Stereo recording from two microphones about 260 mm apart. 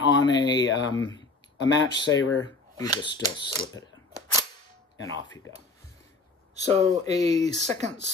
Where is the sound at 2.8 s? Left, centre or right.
Centre.